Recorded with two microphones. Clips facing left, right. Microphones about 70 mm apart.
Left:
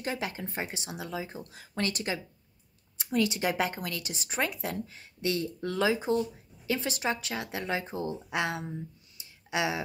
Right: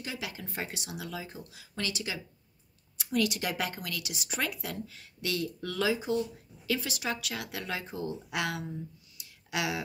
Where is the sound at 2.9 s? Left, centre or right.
Left.